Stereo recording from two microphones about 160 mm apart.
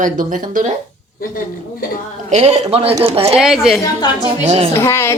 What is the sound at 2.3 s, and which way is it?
Speech, 45° right (ahead or behind).